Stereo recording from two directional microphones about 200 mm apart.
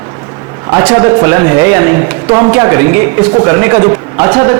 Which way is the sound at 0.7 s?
15° right (ahead or behind).